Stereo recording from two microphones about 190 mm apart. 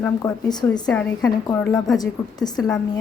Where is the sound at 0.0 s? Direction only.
15° left (ahead or behind).